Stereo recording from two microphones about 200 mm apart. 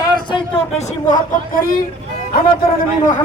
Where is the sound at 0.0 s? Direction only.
20° left (ahead or behind); by 1.8 s 45° left (ahead or behind).